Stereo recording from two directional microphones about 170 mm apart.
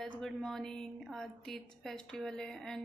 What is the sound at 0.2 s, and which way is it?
A woman's voice, centre (ahead or behind).